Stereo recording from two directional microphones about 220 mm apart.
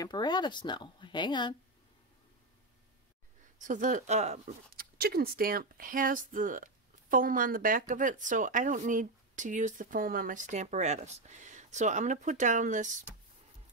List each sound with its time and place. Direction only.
0.0 s speech: 20° left (ahead or behind)
3.5 s speech: 35° right (ahead or behind)
4.9 s speech: 45° right (ahead or behind)